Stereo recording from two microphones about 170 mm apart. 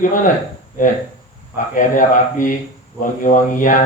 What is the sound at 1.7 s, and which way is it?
A man's voice, 50° left (ahead or behind).